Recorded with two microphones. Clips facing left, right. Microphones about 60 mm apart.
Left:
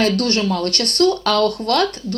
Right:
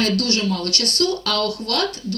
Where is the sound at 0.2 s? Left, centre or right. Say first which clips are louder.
Left 3 dB; left.